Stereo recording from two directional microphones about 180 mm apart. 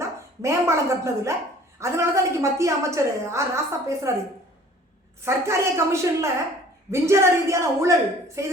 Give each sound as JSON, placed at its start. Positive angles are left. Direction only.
{"t": 0.0, "sound": "a woman's voice", "side_deg": -15}
{"t": 5.2, "sound": "a woman's voice", "side_deg": -15}